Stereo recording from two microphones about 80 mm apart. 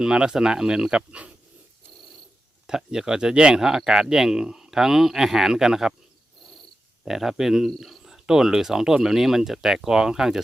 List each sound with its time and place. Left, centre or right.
0.0 s speech: centre
2.6 s speech: centre
7.0 s speech: centre